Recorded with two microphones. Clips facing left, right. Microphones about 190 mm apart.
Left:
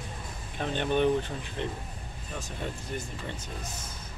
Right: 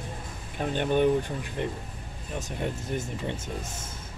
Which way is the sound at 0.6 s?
10° right (ahead or behind).